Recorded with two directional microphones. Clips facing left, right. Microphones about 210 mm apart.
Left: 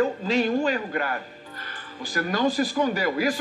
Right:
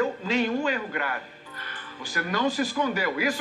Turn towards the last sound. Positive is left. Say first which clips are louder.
# left 3 dB
turn(degrees=35)  # may be behind; listen again after turning